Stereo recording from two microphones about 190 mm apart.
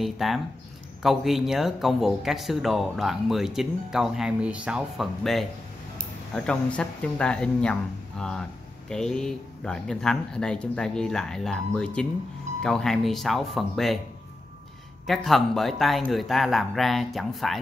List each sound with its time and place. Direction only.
0.0 s speech: centre (ahead or behind)
15.0 s speech: centre (ahead or behind)